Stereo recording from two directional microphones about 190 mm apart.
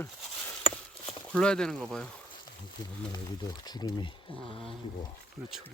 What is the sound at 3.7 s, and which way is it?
Speech, 20° left (ahead or behind).